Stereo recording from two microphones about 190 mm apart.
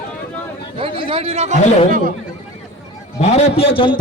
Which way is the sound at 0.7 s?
30° right (ahead or behind).